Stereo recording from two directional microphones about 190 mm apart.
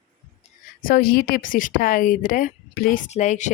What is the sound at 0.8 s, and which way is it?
Speech, 50° left (ahead or behind).